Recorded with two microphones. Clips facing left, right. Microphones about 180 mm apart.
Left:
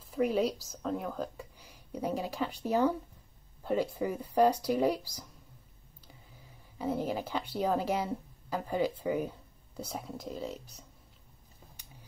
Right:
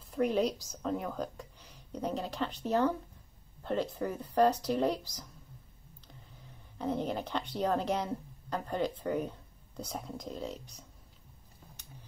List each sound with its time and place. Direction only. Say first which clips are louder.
0.1 s speech: even; 5° left (ahead or behind)
6.8 s speech: left 1 dB; 5° left (ahead or behind)